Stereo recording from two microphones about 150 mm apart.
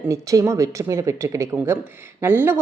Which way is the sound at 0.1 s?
20° right (ahead or behind).